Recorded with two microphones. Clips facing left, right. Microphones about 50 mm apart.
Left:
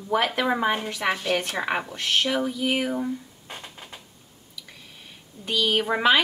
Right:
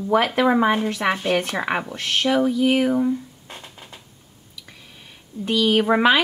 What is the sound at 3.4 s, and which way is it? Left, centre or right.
Music, centre.